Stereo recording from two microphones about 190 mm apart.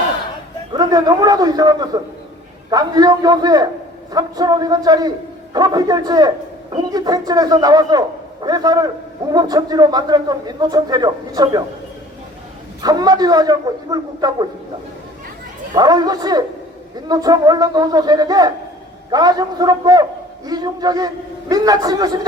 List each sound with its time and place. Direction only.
0.7 s a man's voice: 20° right (ahead or behind)
12.8 s a man's voice: 20° right (ahead or behind)
15.7 s a man's voice: 20° right (ahead or behind)